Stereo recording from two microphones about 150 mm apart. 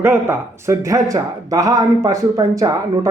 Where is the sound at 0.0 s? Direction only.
15° right (ahead or behind).